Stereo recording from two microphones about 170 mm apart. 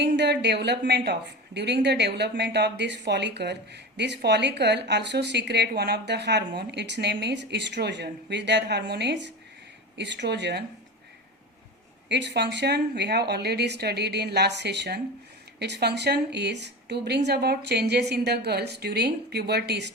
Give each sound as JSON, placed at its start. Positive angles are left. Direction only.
{"t": 0.0, "sound": "speech", "side_deg": -85}
{"t": 12.0, "sound": "speech", "side_deg": -90}